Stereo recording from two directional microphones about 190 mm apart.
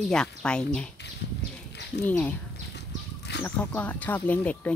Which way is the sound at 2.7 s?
60° left (ahead or behind).